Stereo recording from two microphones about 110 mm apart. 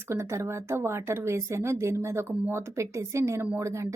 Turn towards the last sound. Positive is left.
turn(degrees=-25)  # may be behind; listen again after turning